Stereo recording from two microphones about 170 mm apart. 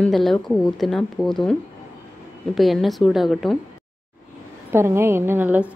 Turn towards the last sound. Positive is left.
turn(degrees=-10)  # may be behind; listen again after turning